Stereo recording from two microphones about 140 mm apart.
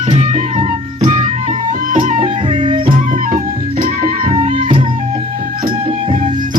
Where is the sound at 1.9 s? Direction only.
70° right (ahead or behind).